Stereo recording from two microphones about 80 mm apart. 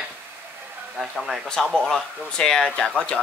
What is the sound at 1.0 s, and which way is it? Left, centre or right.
Speech, centre.